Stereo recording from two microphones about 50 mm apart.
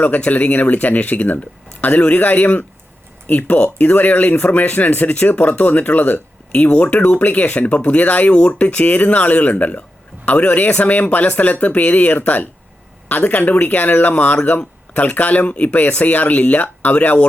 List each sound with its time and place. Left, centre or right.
0.0 s speech: left
6.7 s speech: left